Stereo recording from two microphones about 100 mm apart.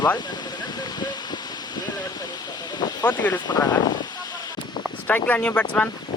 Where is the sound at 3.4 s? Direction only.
40° left (ahead or behind).